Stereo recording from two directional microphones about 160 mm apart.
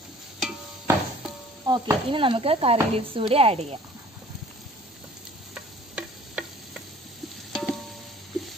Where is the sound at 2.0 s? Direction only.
35° right (ahead or behind).